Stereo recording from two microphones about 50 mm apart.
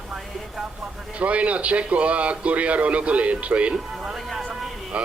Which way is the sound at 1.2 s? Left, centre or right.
Right.